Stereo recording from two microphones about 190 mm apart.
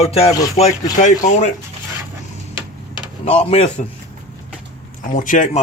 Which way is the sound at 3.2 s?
35° left (ahead or behind).